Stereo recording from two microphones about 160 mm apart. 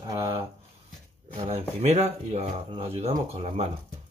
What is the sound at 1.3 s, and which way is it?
Speech, 40° right (ahead or behind).